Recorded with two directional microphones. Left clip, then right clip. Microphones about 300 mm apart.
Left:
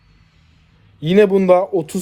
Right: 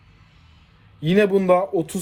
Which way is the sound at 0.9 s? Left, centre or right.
Left.